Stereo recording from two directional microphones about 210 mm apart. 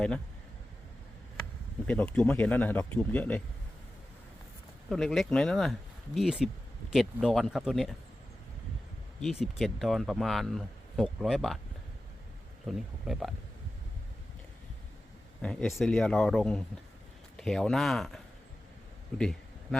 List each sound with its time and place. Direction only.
1.9 s speech: 5° left (ahead or behind)
4.9 s speech: centre (ahead or behind)
9.4 s speech: centre (ahead or behind)
12.6 s speech: centre (ahead or behind)
15.4 s speech: 5° left (ahead or behind)